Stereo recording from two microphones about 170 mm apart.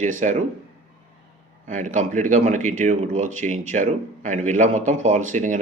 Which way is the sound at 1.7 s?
45° right (ahead or behind).